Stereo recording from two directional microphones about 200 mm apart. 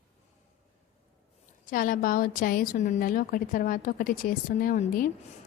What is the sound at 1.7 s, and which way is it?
A woman's voice, 45° left (ahead or behind).